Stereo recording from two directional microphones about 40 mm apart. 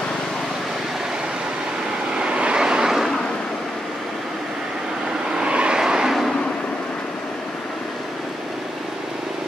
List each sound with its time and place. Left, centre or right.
2.1 s vehicle: right
5.3 s vehicle: right